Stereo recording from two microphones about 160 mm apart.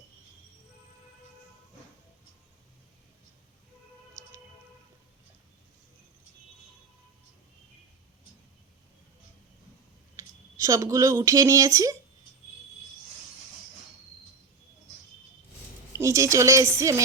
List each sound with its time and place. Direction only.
10.2 s speech: 20° right (ahead or behind)
15.9 s speech: 20° right (ahead or behind)